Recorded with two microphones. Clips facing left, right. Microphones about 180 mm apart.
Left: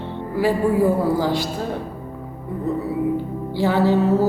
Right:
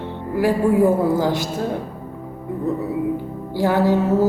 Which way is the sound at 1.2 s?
20° right (ahead or behind).